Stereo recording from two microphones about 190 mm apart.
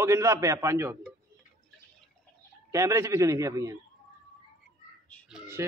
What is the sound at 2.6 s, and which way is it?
A man's voice, 15° right (ahead or behind).